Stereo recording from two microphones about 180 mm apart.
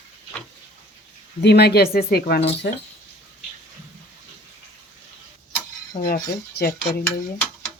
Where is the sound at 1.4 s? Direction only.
65° left (ahead or behind).